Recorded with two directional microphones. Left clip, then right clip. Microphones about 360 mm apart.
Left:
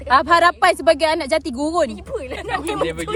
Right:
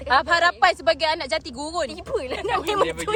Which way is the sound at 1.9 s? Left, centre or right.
Right.